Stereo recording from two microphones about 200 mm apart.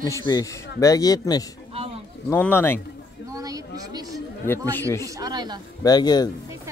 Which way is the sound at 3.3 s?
20° right (ahead or behind).